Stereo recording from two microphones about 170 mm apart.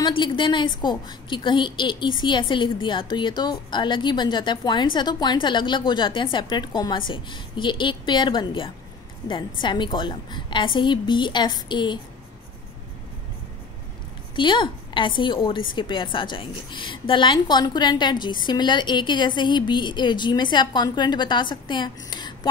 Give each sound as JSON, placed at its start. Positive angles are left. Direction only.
{"t": 0.0, "sound": "a woman's voice", "side_deg": 30}
{"t": 14.3, "sound": "a woman's voice", "side_deg": 30}